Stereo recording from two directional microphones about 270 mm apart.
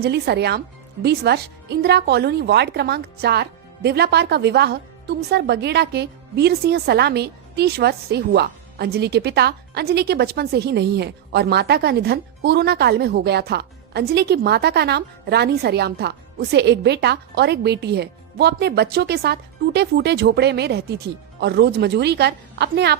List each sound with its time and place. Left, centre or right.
0.0 s a woman's voice: right